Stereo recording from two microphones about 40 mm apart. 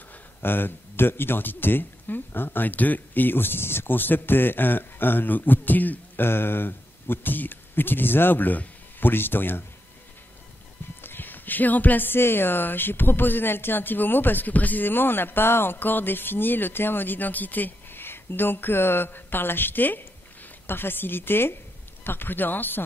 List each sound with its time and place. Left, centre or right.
0.4 s speech: left
6.2 s speech: left
9.1 s speech: left
11.0 s a sound: left
12.1 s speech: left
20.6 s speech: left